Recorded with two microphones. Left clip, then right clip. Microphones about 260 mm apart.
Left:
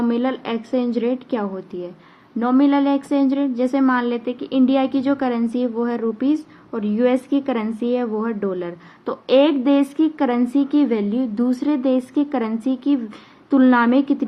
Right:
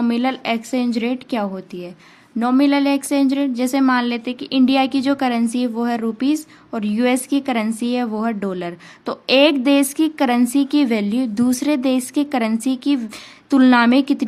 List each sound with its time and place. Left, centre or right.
0.0 s speech: right